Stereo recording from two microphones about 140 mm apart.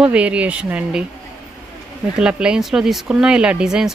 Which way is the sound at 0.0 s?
10° right (ahead or behind).